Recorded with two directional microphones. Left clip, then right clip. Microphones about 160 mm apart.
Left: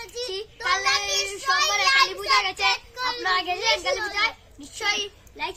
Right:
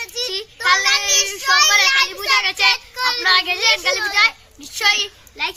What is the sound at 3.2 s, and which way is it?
A child's voice, 20° left (ahead or behind).